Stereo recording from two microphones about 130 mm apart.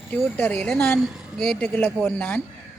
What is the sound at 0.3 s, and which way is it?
A man's voice, 10° left (ahead or behind).